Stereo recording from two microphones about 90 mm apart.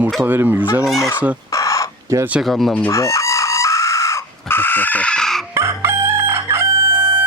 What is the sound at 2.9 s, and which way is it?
Chicken, 35° left (ahead or behind).